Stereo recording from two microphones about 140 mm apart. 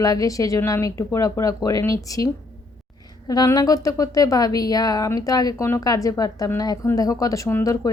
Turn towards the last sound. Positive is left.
turn(degrees=20)  # may be behind; listen again after turning